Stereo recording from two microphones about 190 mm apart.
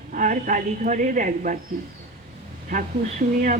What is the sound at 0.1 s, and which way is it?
Speech, 45° right (ahead or behind).